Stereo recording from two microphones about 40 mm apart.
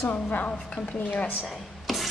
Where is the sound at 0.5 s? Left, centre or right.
Centre.